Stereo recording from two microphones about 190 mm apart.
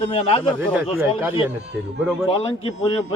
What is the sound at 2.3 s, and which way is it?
Speech, 30° left (ahead or behind).